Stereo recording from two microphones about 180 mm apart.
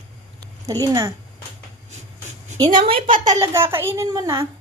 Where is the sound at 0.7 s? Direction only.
20° right (ahead or behind).